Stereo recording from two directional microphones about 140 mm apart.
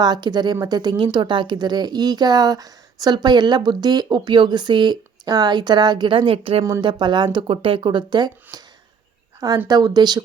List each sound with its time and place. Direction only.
0.0 s speech: 30° right (ahead or behind)
6.7 s speech: 30° right (ahead or behind)
9.6 s speech: 30° right (ahead or behind)